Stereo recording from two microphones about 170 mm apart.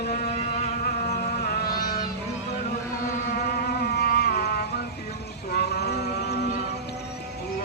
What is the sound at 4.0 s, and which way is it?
Music, 70° left (ahead or behind).